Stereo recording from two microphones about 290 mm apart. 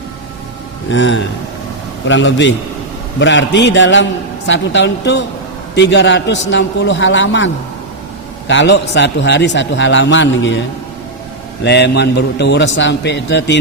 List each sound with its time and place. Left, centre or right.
0.9 s a man's voice: left
11.6 s a man's voice: left